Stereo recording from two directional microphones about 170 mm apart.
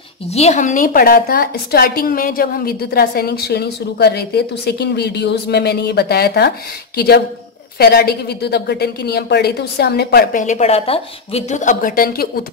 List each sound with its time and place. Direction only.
0.3 s a woman's voice: 40° left (ahead or behind); by 12.3 s 60° left (ahead or behind)